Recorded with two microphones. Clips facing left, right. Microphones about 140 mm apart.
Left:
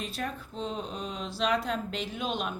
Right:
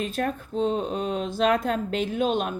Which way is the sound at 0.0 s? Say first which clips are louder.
Right 8 dB; 45° right (ahead or behind).